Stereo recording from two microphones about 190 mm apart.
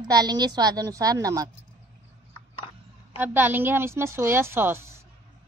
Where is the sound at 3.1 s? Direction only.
10° right (ahead or behind).